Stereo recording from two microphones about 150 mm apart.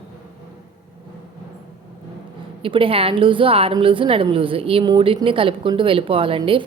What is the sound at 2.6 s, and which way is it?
A woman's voice, 35° right (ahead or behind).